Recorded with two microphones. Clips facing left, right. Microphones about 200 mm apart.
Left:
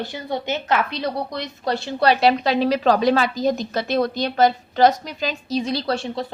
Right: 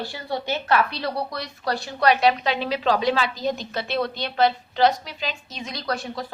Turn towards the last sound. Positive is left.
turn(degrees=25)  # may be behind; listen again after turning